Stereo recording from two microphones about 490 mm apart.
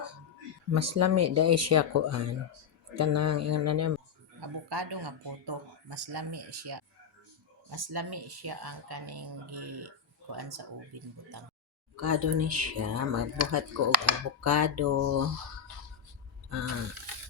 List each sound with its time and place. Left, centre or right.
0.7 s speech: right
4.4 s speech: right
11.9 s speech: right
16.5 s a sound: right